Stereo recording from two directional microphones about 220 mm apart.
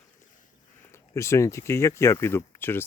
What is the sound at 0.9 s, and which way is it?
Speech, 10° left (ahead or behind).